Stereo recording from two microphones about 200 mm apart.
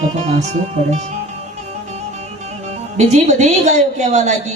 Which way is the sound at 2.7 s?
35° right (ahead or behind).